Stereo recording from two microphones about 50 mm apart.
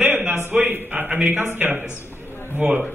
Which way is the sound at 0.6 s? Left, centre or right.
Right.